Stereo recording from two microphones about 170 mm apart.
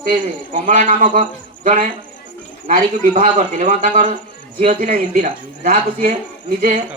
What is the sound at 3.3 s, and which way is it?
A man's voice, 45° right (ahead or behind).